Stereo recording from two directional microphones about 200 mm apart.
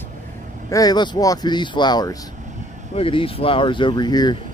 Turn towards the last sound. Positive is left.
turn(degrees=20)  # may be behind; listen again after turning